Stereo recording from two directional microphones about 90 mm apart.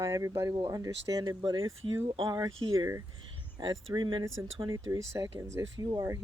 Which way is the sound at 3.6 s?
50° right (ahead or behind).